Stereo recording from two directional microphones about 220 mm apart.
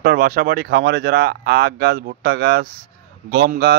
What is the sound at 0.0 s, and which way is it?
Speech, 40° right (ahead or behind).